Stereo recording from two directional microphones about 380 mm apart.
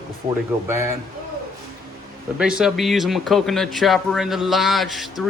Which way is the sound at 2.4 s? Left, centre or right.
Centre.